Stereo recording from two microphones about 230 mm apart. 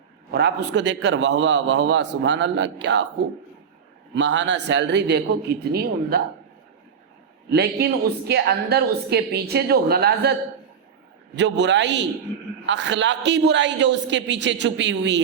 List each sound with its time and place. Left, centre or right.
0.3 s a man's voice: right
4.1 s a man's voice: right
7.5 s a man's voice: right
11.3 s a man's voice: right